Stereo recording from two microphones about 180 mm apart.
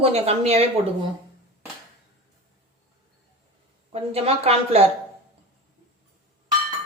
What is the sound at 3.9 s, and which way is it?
Speech, 35° right (ahead or behind).